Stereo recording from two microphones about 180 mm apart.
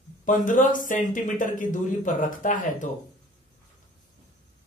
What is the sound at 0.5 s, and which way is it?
Speech, 45° left (ahead or behind).